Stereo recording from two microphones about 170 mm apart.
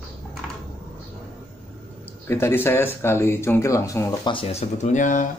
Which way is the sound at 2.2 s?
15° left (ahead or behind).